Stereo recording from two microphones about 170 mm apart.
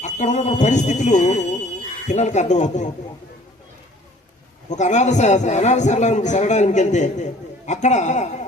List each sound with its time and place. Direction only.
0.0 s a man's voice: 40° left (ahead or behind)
4.7 s a man's voice: 45° left (ahead or behind)